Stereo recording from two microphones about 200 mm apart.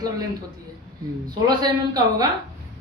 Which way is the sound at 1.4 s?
20° right (ahead or behind).